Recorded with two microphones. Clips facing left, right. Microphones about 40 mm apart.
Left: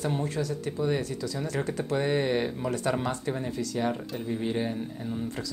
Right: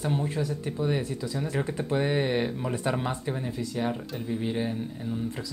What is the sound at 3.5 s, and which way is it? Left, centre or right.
Speech, right.